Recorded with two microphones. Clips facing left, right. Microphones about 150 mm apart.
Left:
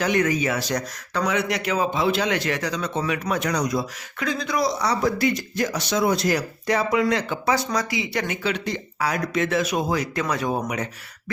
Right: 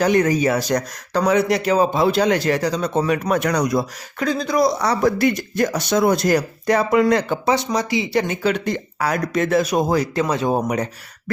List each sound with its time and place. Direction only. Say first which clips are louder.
0.0 s speech: right 5 dB; 35° right (ahead or behind); by 3.8 s 55° right (ahead or behind)
4.2 s speech: right 6 dB; 35° right (ahead or behind)
4.8 s speech: right 4 dB; 60° right (ahead or behind)
7.4 s speech: right 4 dB; 20° right (ahead or behind)
8.4 s speech: right 6 dB; 50° right (ahead or behind); by 10.6 s 25° right (ahead or behind)